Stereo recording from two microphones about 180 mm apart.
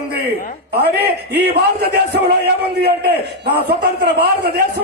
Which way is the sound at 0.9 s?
65° right (ahead or behind).